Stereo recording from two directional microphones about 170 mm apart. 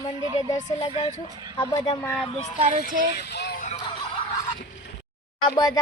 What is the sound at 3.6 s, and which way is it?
Music, 45° left (ahead or behind).